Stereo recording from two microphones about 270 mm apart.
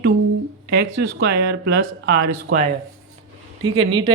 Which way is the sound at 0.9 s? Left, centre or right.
Right.